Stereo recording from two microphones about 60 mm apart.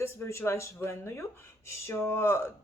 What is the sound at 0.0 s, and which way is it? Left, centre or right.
A woman's voice, left.